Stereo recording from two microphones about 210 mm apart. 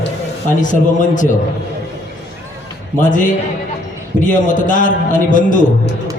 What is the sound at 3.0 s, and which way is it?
A man's voice, 40° left (ahead or behind).